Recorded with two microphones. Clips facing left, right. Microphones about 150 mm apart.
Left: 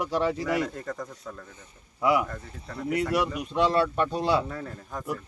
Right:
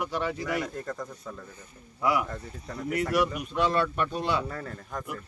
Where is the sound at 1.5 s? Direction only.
20° left (ahead or behind).